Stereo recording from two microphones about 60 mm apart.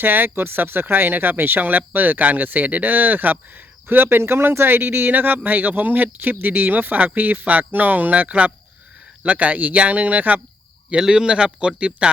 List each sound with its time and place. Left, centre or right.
0.0 s speech: right
10.8 s speech: centre